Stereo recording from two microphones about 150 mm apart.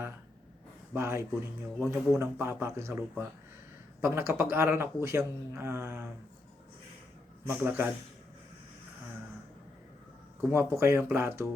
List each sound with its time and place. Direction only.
0.9 s speech: 15° right (ahead or behind)
7.4 s speech: 15° right (ahead or behind)
10.5 s speech: 15° right (ahead or behind)